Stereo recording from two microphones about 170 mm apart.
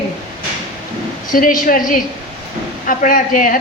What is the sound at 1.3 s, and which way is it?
A woman's voice, 55° left (ahead or behind).